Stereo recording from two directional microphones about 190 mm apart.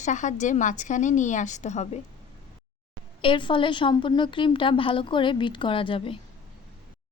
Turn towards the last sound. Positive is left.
turn(degrees=25)  # may be behind; listen again after turning